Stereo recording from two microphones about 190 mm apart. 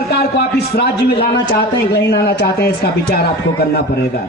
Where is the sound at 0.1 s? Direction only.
55° left (ahead or behind).